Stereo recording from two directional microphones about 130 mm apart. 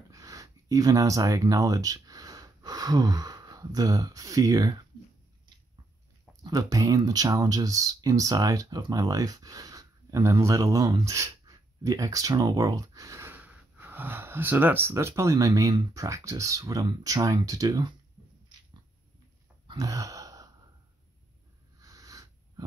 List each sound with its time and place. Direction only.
0.1 s speech: 25° right (ahead or behind)
6.4 s speech: 25° right (ahead or behind)
19.8 s a sound: 25° right (ahead or behind)
21.8 s wheeze: 25° right (ahead or behind)